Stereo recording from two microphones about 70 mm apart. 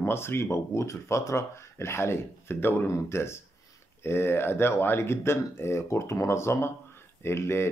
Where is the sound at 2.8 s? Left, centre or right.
Left.